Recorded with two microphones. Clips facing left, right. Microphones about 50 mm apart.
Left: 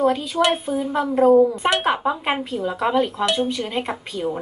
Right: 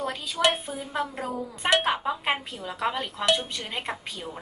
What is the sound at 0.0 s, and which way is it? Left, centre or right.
Speech, left.